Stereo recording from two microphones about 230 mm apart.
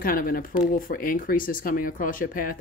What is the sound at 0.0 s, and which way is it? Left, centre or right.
Speech, left.